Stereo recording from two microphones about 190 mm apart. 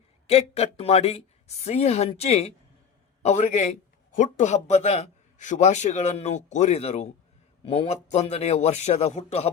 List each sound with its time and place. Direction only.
0.3 s a man's voice: 30° left (ahead or behind)